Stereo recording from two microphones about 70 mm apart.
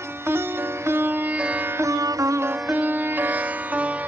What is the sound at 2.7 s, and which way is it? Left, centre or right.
Music, right.